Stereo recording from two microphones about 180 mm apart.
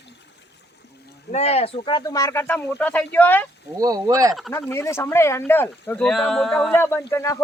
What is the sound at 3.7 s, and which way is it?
Speech, 20° right (ahead or behind).